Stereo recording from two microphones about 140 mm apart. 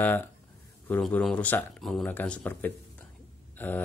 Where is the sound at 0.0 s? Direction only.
15° left (ahead or behind).